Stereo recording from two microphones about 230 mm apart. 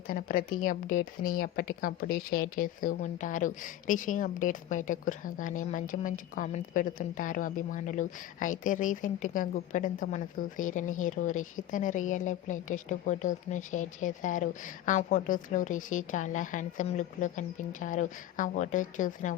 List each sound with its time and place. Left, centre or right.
0.1 s a woman's voice: left